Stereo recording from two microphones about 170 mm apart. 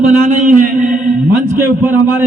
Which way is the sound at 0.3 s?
50° right (ahead or behind).